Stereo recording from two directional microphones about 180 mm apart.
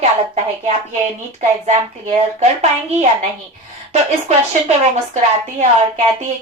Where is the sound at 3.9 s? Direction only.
40° right (ahead or behind).